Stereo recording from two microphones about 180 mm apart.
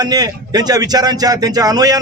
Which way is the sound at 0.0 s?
20° right (ahead or behind).